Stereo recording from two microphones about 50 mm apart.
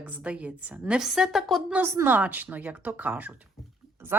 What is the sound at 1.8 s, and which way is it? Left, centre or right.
Speech, right.